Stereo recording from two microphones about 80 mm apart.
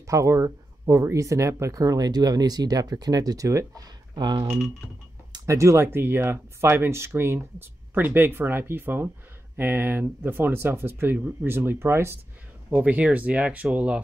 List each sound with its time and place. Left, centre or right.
0.0 s speech: right
4.1 s speech: right
5.5 s speech: right
12.7 s speech: centre